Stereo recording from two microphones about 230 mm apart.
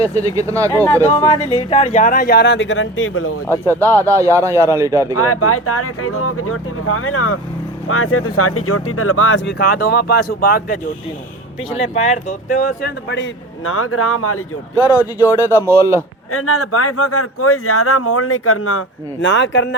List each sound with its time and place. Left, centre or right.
0.0 s speech: left
0.3 s a man's voice: centre
0.7 s speech: centre
1.7 s speech: left
3.5 s speech: centre
4.1 s a man's voice: centre
5.1 s speech: left
12.1 s speech: left
14.8 s a man's voice: centre
16.3 s speech: left